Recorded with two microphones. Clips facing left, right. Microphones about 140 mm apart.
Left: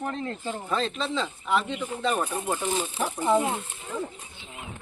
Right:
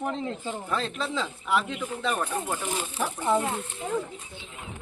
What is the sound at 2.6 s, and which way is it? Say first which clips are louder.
Speech: left 2 dB; 15° left (ahead or behind).